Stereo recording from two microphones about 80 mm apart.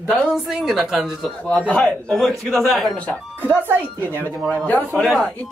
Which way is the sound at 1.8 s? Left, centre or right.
Centre.